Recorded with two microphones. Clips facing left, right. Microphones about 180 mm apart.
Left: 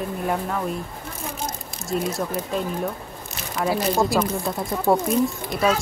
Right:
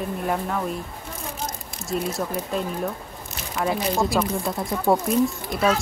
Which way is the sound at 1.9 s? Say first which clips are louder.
Left 1 dB; centre (ahead or behind).